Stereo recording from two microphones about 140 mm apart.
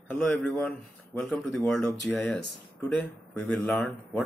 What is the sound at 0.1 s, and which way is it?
Speech, 5° left (ahead or behind).